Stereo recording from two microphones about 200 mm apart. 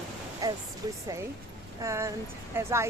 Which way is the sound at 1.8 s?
15° right (ahead or behind).